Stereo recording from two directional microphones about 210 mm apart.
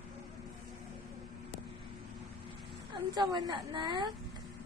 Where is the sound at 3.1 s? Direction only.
20° right (ahead or behind).